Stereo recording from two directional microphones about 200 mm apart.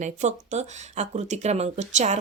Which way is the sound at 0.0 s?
35° right (ahead or behind).